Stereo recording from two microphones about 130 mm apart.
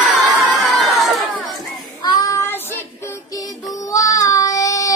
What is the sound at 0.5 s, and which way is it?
Crowd, centre (ahead or behind).